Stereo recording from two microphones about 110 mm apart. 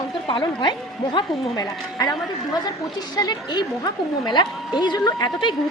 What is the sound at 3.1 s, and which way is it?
A woman's voice, 40° left (ahead or behind).